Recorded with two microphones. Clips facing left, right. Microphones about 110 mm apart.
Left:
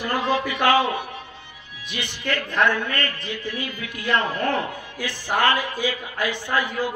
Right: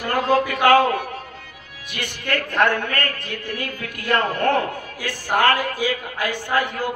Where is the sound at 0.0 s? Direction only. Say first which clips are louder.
Right 4 dB; 45° right (ahead or behind).